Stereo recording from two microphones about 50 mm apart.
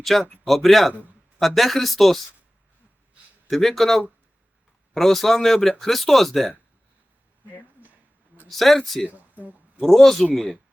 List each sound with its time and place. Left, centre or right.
0.0 s speech: centre
3.4 s speech: centre
8.4 s speech: centre
9.0 s a sound: right
9.8 s speech: centre